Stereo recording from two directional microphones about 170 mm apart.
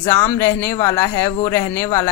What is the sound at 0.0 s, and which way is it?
Speech, 15° left (ahead or behind).